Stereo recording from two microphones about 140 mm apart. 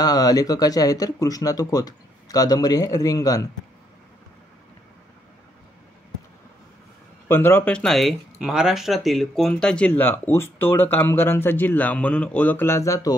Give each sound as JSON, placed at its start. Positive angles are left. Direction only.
{"t": 0.0, "sound": "speech", "side_deg": 25}
{"t": 7.2, "sound": "speech", "side_deg": 15}